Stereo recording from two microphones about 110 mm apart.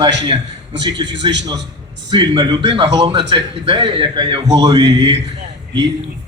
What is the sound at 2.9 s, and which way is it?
A man's voice, 40° right (ahead or behind).